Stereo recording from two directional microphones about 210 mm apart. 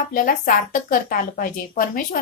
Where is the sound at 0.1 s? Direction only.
40° left (ahead or behind).